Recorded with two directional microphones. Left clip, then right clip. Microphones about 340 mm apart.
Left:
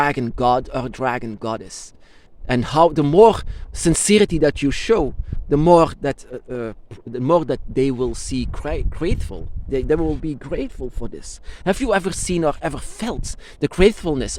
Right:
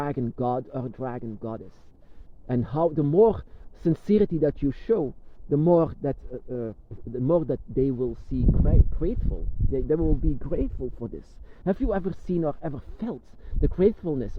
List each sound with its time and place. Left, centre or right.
0.0 s speech: centre